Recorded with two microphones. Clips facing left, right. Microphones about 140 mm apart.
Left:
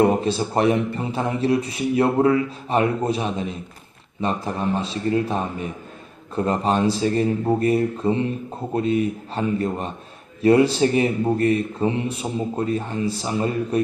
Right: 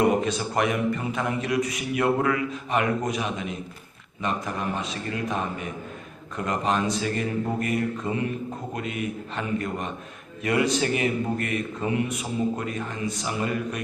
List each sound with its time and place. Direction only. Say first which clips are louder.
0.0 s a man's voice: left 4 dB; 30° left (ahead or behind)